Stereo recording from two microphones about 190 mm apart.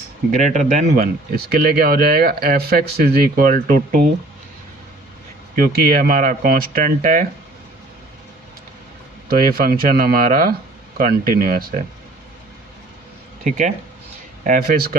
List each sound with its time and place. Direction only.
0.3 s speech: 40° right (ahead or behind)
5.5 s speech: 50° right (ahead or behind)
9.3 s speech: 50° right (ahead or behind)
13.4 s speech: 40° right (ahead or behind)